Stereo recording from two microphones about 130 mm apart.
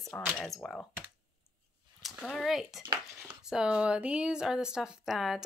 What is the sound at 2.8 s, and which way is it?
Speech, 35° right (ahead or behind).